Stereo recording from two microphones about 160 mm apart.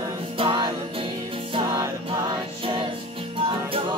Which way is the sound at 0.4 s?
30° right (ahead or behind).